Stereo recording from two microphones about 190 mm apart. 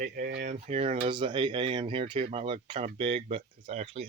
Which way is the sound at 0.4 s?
35° right (ahead or behind).